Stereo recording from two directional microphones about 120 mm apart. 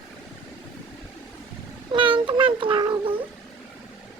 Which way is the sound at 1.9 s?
45° right (ahead or behind).